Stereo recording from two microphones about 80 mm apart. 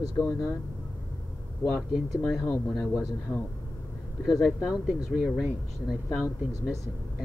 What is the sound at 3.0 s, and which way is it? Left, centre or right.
Speech, left.